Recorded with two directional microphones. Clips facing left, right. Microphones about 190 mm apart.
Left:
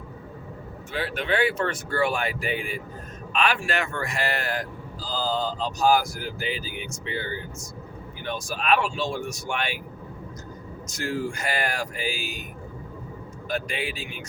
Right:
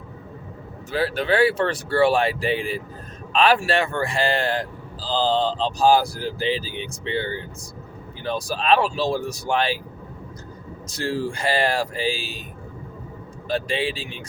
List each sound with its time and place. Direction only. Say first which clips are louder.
0.9 s speech: right 5 dB; 35° right (ahead or behind)
10.8 s speech: right 3 dB; 30° right (ahead or behind)
13.5 s speech: right 5 dB; 30° right (ahead or behind)